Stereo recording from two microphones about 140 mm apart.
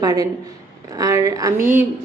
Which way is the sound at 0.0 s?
25° right (ahead or behind).